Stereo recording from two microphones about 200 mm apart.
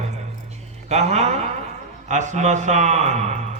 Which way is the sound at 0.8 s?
35° right (ahead or behind).